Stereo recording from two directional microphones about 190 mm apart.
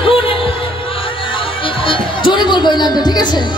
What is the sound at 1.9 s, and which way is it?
Music, 25° left (ahead or behind).